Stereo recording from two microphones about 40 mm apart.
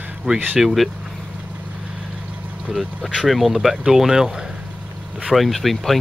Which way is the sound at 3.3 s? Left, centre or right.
Centre.